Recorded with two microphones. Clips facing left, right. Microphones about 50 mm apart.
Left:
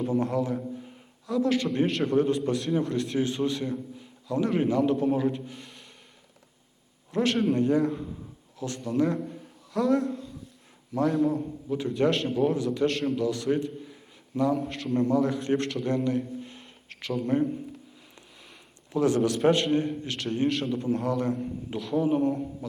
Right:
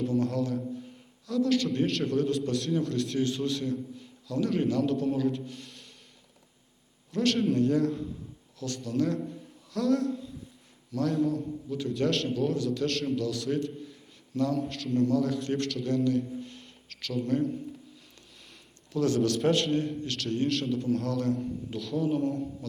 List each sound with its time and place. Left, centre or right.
0.1 s a man's voice: centre
7.1 s a man's voice: left
7.3 s a man's voice: centre; by 15.8 s left
15.8 s a sound: centre
17.2 s a man's voice: centre
18.9 s a man's voice: centre